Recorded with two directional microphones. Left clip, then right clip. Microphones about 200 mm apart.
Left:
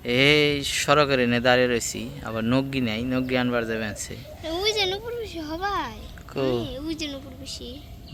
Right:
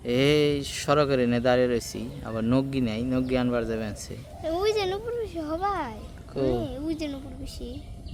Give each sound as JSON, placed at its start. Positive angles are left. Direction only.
{"t": 0.0, "sound": "speech", "side_deg": 0}
{"t": 4.4, "sound": "a sound", "side_deg": -30}
{"t": 6.6, "sound": "a woman's voice", "side_deg": -40}